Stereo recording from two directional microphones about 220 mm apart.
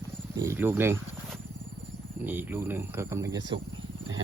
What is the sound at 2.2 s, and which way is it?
Speech, 10° right (ahead or behind).